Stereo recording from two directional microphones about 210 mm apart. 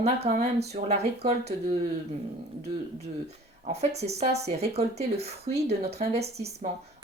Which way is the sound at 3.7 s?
30° right (ahead or behind).